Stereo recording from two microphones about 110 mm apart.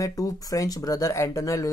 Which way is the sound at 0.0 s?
30° left (ahead or behind).